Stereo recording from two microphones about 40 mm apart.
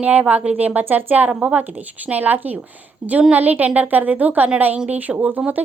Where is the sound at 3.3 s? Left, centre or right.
Right.